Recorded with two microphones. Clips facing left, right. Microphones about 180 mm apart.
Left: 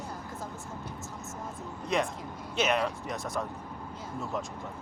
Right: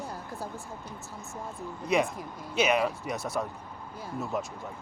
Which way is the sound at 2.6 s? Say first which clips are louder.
Right 3 dB; 5° right (ahead or behind).